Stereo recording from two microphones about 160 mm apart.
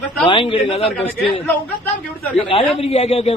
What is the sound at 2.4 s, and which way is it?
Speech, 35° left (ahead or behind).